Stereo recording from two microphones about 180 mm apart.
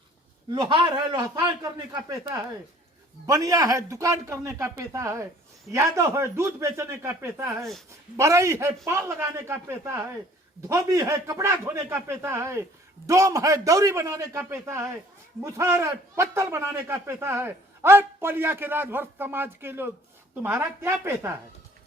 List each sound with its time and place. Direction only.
0.5 s a man's voice: 25° right (ahead or behind)